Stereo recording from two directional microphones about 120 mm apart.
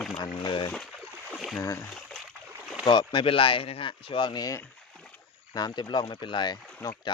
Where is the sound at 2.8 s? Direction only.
40° left (ahead or behind).